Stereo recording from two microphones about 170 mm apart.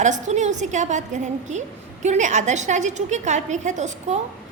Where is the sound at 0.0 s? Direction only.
45° right (ahead or behind).